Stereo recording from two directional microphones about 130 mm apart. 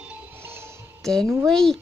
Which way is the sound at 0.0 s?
15° right (ahead or behind).